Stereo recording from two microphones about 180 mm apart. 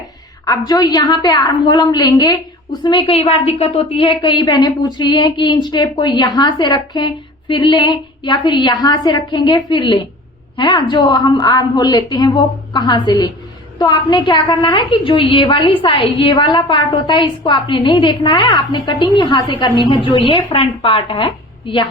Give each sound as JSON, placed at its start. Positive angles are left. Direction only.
{"t": 0.4, "sound": "a woman's voice", "side_deg": 20}